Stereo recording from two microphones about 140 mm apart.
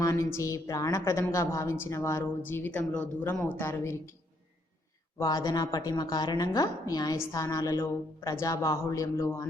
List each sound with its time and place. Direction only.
0.0 s a woman's voice: 20° left (ahead or behind)
5.1 s a woman's voice: 25° left (ahead or behind)